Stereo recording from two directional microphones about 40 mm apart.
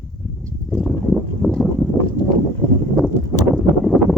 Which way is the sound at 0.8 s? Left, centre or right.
Centre.